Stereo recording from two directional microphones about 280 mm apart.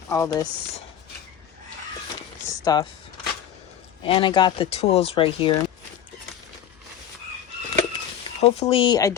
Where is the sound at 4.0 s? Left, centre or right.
Centre.